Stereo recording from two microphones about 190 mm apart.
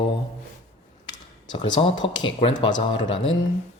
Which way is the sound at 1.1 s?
25° left (ahead or behind).